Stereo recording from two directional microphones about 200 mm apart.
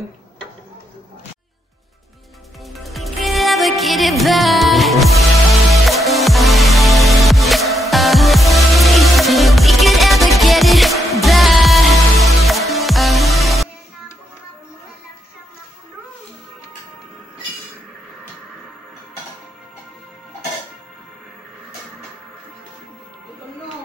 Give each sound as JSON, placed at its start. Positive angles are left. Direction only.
{"t": 2.7, "sound": "music", "side_deg": 0}